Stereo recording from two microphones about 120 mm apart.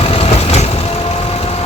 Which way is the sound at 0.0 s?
55° left (ahead or behind).